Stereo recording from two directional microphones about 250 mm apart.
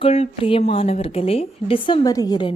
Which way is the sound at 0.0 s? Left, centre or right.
Left.